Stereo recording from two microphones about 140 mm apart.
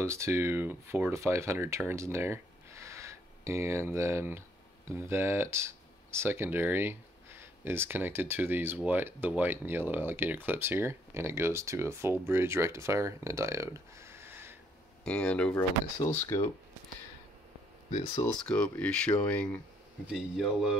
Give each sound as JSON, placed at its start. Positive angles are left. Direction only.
{"t": 0.0, "sound": "speech", "side_deg": -20}
{"t": 15.0, "sound": "speech", "side_deg": 10}
{"t": 16.0, "sound": "speech", "side_deg": 25}
{"t": 18.4, "sound": "speech", "side_deg": 5}
{"t": 20.1, "sound": "speech", "side_deg": 0}